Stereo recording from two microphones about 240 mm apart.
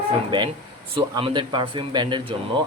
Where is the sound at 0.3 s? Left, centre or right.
Centre.